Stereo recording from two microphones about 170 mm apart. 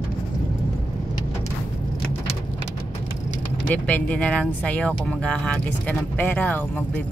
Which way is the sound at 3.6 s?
10° left (ahead or behind).